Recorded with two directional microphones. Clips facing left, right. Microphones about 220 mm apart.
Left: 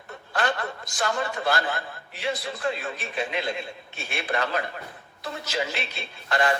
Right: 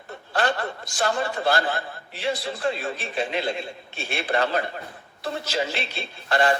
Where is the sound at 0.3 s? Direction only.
30° right (ahead or behind).